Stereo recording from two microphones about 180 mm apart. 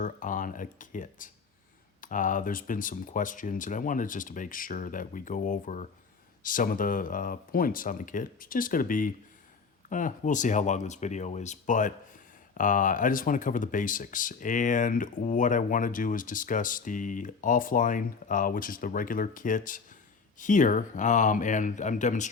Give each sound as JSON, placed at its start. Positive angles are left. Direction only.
{"t": 0.0, "sound": "speech", "side_deg": 45}